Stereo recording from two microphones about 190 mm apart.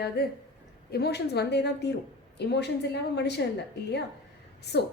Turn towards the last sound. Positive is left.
turn(degrees=60)  # may be behind; listen again after turning